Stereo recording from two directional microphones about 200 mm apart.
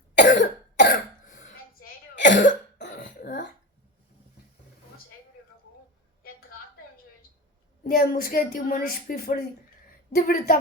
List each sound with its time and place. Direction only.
0.1 s cough: 55° left (ahead or behind)
1.3 s dishes: 40° left (ahead or behind)
2.1 s cough: 65° left (ahead or behind)
2.9 s throat clearing: 40° left (ahead or behind)
7.9 s a woman's voice: 45° left (ahead or behind)